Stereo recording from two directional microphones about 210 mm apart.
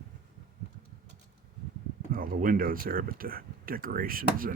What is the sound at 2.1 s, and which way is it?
Speech, 40° right (ahead or behind).